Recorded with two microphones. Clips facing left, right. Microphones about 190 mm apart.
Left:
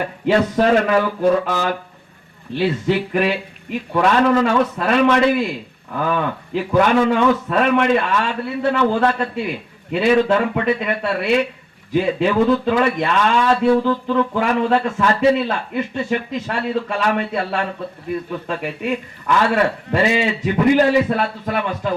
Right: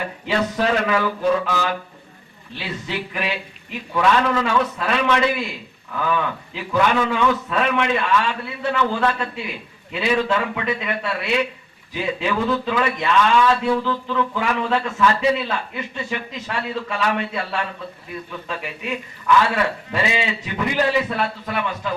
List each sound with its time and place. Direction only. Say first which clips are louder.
0.3 s a man's voice: left 6 dB; 50° left (ahead or behind)